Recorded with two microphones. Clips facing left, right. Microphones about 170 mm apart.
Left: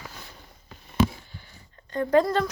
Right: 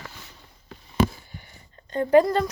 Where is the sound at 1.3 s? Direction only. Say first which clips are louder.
Right 3 dB; 15° right (ahead or behind).